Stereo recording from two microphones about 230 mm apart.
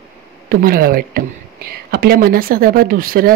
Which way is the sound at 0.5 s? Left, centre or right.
Right.